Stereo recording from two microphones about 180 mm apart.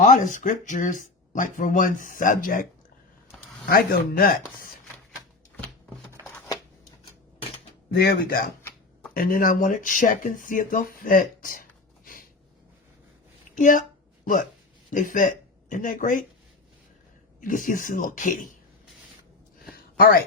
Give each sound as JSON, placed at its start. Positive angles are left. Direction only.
{"t": 0.0, "sound": "speech", "side_deg": 45}
{"t": 3.7, "sound": "speech", "side_deg": 55}
{"t": 6.2, "sound": "shuffling cards", "side_deg": 10}
{"t": 7.9, "sound": "speech", "side_deg": 60}
{"t": 13.6, "sound": "speech", "side_deg": 50}
{"t": 14.8, "sound": "speech", "side_deg": 45}
{"t": 17.7, "sound": "speech", "side_deg": 50}
{"t": 19.7, "sound": "a sound", "side_deg": 55}